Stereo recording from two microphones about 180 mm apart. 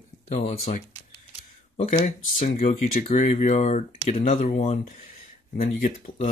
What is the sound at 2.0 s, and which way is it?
Speech, 40° left (ahead or behind).